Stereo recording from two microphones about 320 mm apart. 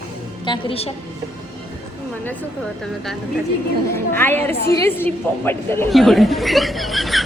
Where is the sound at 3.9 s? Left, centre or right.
Centre.